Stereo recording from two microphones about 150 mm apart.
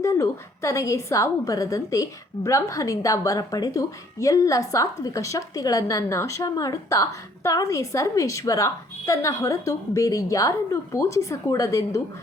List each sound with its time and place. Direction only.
0.0 s a woman's voice: 20° left (ahead or behind)